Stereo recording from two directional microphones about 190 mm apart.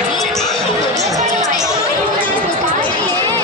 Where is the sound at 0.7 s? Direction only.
15° right (ahead or behind).